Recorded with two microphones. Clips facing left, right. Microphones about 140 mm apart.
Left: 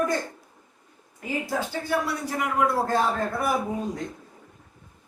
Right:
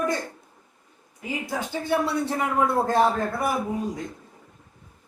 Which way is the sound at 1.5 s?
25° right (ahead or behind).